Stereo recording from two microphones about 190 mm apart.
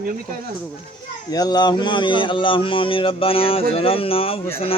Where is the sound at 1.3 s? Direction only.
20° left (ahead or behind).